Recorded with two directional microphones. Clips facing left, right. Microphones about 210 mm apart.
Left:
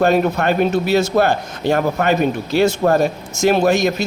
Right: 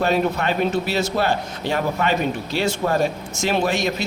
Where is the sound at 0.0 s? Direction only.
50° left (ahead or behind).